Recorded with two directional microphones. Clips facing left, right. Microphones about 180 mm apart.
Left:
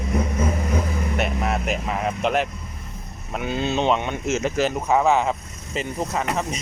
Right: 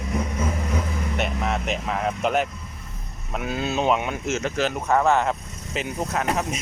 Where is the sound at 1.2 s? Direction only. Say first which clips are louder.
Left 1 dB; 5° left (ahead or behind).